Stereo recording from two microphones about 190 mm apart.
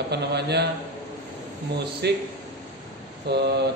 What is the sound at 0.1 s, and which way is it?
Speech, 60° right (ahead or behind).